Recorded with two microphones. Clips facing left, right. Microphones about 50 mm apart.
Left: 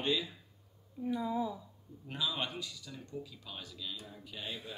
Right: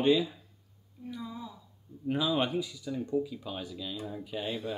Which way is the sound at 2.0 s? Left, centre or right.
Centre.